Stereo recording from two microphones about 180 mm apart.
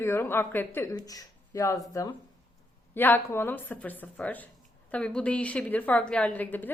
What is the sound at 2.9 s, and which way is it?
A woman's voice, 10° left (ahead or behind).